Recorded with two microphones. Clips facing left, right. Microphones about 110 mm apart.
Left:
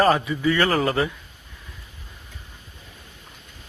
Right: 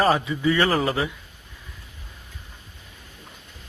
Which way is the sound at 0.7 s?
5° right (ahead or behind).